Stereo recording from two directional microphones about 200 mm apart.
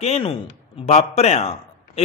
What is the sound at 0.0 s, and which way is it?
A man's voice, 30° left (ahead or behind).